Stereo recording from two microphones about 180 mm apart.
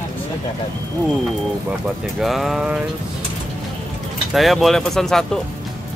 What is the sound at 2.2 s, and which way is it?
Speech, centre (ahead or behind).